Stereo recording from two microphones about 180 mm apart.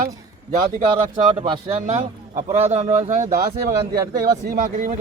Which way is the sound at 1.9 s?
40° right (ahead or behind).